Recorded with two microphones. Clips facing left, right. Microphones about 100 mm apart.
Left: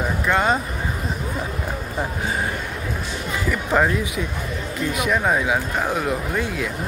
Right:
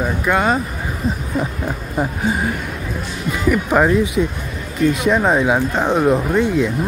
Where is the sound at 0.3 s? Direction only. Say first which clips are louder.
Right 2 dB; 5° right (ahead or behind).